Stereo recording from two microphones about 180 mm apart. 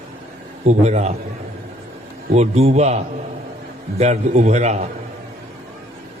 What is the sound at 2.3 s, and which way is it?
Speech, 35° right (ahead or behind).